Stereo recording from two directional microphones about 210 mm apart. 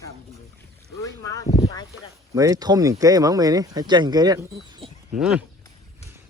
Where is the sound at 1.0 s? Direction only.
15° left (ahead or behind).